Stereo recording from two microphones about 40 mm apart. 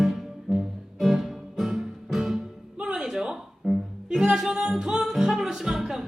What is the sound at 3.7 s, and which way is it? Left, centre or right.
Music, centre.